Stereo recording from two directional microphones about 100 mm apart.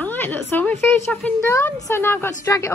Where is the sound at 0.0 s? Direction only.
20° left (ahead or behind).